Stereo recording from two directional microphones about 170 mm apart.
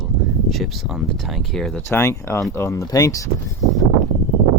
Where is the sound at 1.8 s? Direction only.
15° left (ahead or behind).